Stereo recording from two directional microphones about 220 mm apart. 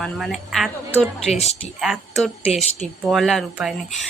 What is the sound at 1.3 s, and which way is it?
Speech, 30° left (ahead or behind).